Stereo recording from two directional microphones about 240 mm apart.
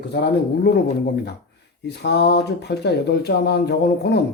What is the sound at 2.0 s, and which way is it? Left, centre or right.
Speech, left.